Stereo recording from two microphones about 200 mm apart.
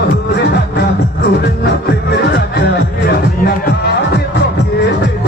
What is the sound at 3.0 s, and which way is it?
Music, 50° left (ahead or behind).